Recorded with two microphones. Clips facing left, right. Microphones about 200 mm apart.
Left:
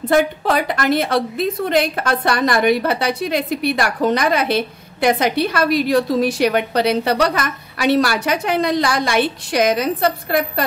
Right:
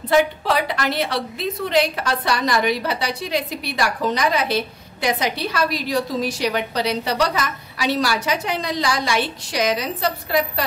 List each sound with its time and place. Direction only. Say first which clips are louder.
0.1 s a woman's voice: left 2 dB; 50° left (ahead or behind)